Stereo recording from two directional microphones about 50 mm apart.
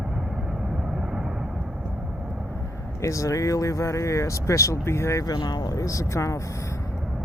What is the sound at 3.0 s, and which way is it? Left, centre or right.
Speech, left.